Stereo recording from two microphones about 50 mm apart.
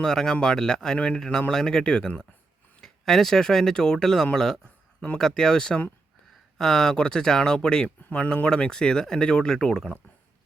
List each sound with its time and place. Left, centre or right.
0.0 s speech: centre